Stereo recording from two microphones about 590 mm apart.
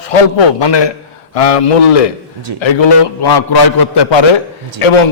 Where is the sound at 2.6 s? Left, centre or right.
Left.